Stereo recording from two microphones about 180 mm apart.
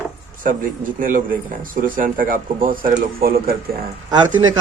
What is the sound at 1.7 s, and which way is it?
Speech, 50° right (ahead or behind).